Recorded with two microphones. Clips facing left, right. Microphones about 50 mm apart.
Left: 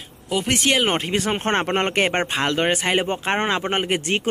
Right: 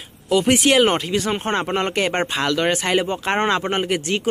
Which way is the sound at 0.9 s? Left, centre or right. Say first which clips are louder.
Right 1 dB; left.